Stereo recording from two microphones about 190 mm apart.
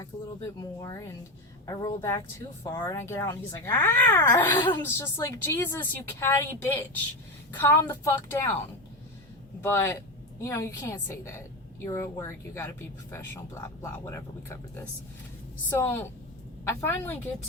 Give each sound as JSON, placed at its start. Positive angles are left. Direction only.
{"t": 0.1, "sound": "speech", "side_deg": 20}
{"t": 9.6, "sound": "speech", "side_deg": 15}
{"t": 15.8, "sound": "speech", "side_deg": 15}